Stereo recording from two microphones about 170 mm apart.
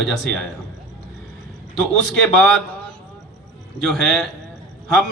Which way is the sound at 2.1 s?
Centre (ahead or behind).